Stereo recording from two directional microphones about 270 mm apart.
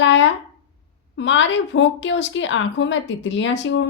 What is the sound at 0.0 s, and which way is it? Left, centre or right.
A woman's voice, left.